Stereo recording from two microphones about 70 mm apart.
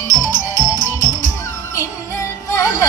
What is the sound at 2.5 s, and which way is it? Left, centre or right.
Music, left.